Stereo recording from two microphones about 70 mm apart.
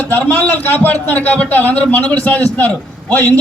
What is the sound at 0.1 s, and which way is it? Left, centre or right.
A man's voice, left.